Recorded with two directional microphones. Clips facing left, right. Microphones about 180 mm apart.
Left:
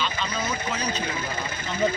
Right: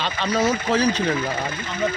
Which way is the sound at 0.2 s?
70° right (ahead or behind).